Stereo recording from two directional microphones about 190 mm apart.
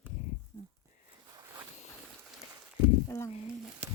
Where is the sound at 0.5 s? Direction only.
20° left (ahead or behind).